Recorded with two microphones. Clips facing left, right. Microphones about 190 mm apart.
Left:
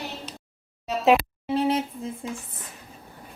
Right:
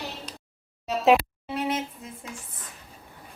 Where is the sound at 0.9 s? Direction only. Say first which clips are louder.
Even; centre (ahead or behind).